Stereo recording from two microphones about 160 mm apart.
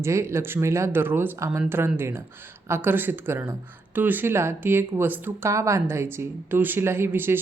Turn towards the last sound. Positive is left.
turn(degrees=-15)  # may be behind; listen again after turning